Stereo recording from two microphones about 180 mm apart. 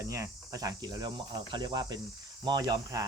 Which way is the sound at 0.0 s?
15° right (ahead or behind).